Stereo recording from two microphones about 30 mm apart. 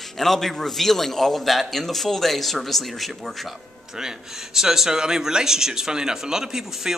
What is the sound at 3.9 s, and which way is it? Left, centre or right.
A man's voice, centre.